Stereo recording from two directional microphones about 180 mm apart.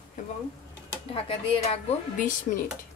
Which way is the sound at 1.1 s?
30° left (ahead or behind).